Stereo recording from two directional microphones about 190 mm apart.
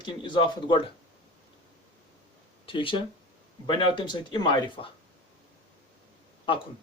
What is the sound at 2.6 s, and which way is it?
Speech, 25° left (ahead or behind).